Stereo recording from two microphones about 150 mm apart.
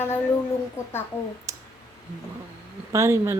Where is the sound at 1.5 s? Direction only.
20° right (ahead or behind).